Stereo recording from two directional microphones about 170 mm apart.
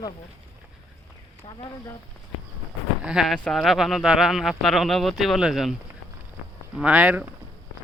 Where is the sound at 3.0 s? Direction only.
Centre (ahead or behind).